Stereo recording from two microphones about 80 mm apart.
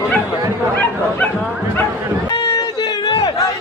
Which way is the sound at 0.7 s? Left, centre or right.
Left.